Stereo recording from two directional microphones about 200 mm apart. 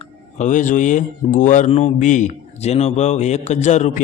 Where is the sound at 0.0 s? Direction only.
40° left (ahead or behind).